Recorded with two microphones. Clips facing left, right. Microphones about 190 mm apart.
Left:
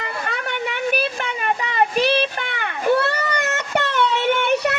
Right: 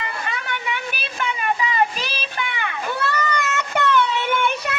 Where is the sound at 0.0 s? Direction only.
60° left (ahead or behind).